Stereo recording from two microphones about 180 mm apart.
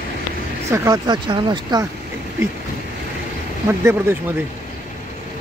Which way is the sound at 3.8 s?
15° right (ahead or behind).